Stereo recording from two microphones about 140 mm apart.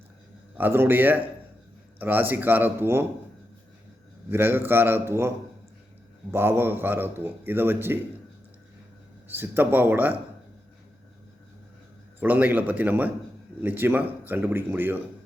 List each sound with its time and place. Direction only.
0.5 s a man's voice: 15° right (ahead or behind)
4.3 s a man's voice: 15° right (ahead or behind)
6.3 s a man's voice: 15° right (ahead or behind)
9.3 s a man's voice: 15° right (ahead or behind)
12.2 s a man's voice: 10° right (ahead or behind)